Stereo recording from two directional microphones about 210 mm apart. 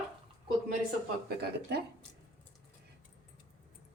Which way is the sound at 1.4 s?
50° right (ahead or behind).